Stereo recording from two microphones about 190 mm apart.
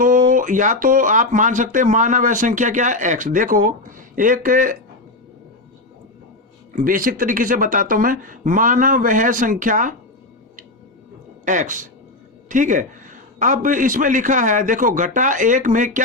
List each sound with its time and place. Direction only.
0.0 s speech: 45° right (ahead or behind)
6.7 s speech: 45° right (ahead or behind)
11.4 s speech: 40° right (ahead or behind)